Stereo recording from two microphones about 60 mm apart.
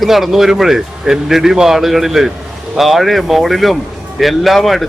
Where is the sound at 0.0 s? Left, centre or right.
Centre.